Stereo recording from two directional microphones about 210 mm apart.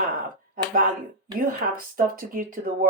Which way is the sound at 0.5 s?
40° right (ahead or behind).